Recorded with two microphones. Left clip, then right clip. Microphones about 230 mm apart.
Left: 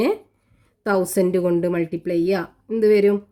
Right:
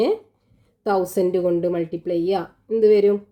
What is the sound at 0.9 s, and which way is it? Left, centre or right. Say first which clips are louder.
A woman's voice: even; left.